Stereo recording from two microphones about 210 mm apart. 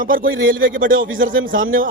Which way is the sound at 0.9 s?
70° right (ahead or behind).